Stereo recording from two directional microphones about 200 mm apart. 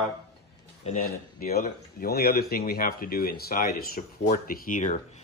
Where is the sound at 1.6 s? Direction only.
45° left (ahead or behind).